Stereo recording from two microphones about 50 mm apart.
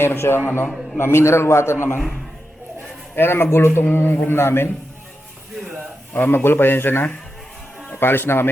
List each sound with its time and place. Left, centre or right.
0.0 s a man's voice: left
3.2 s a man's voice: left
3.8 s a man's voice: left
4.3 s a man's voice: left
6.1 s a man's voice: left